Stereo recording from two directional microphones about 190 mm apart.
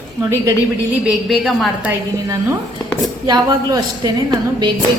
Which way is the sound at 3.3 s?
20° right (ahead or behind).